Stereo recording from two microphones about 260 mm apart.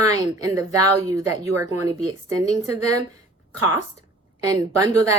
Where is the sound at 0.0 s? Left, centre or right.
Centre.